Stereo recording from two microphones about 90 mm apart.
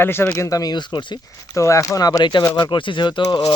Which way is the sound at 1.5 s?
35° left (ahead or behind).